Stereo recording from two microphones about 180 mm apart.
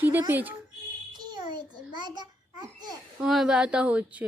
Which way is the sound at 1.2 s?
25° right (ahead or behind).